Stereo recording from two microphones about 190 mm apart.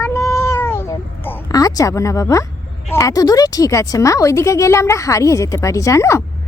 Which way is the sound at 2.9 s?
15° left (ahead or behind).